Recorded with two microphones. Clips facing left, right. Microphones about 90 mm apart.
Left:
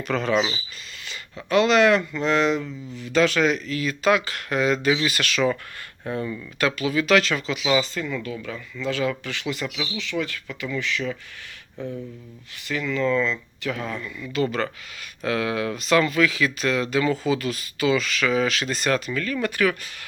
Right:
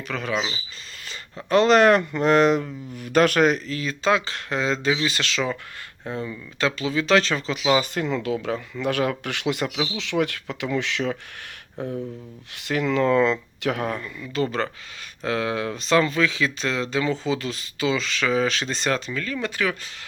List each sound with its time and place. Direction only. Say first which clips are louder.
0.1 s speech: left 4 dB; centre (ahead or behind)
1.0 s speech: right 1 dB; 35° right (ahead or behind)
7.9 s speech: right 4 dB; 65° right (ahead or behind)
8.8 s speech: even; 60° right (ahead or behind)
9.7 s speech: right 4 dB; 35° right (ahead or behind)
10.0 s speech: right 4 dB; 70° right (ahead or behind)
11.8 s speech: right 3 dB; 60° right (ahead or behind)
14.4 s speech: even; 30° right (ahead or behind)